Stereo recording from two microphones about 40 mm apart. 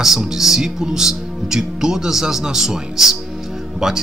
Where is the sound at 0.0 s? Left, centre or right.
Centre.